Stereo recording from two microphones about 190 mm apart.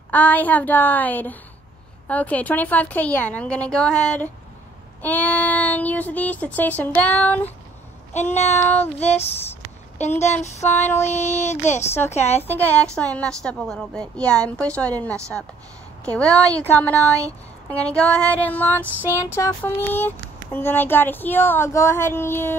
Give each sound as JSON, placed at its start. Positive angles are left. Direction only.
{"t": 0.1, "sound": "speech", "side_deg": 10}
{"t": 9.0, "sound": "speech", "side_deg": 35}
{"t": 12.4, "sound": "a woman's voice", "side_deg": 10}